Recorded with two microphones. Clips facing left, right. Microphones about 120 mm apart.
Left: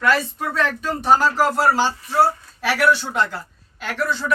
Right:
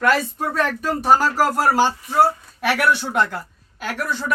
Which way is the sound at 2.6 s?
60° right (ahead or behind).